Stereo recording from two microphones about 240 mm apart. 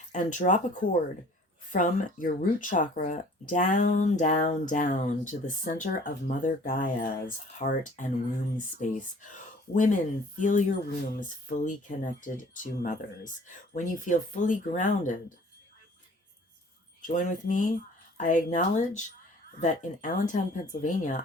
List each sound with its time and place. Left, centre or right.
0.1 s speech: left
17.1 s speech: left